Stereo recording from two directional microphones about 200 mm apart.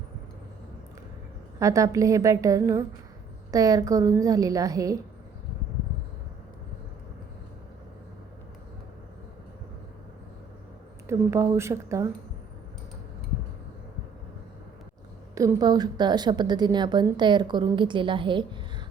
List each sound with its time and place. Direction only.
1.5 s a woman's voice: 15° right (ahead or behind)
11.0 s a woman's voice: 15° right (ahead or behind)
15.4 s a woman's voice: 20° right (ahead or behind)